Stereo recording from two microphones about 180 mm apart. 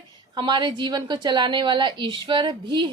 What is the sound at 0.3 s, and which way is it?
A woman's voice, 25° right (ahead or behind).